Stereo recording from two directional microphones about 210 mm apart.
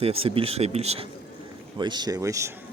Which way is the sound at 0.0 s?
25° right (ahead or behind).